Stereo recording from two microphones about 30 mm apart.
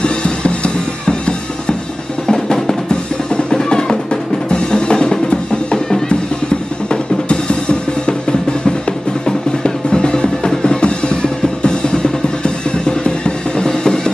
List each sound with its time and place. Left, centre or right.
0.0 s music: left
2.2 s music: centre
2.9 s drum: left
3.5 s music: left
6.9 s music: left
13.7 s music: left